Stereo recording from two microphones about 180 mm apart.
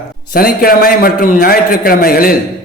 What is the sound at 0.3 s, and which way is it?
A man's voice, 55° left (ahead or behind).